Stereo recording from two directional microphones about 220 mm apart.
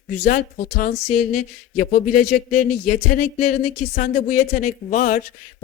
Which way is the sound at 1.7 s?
40° left (ahead or behind).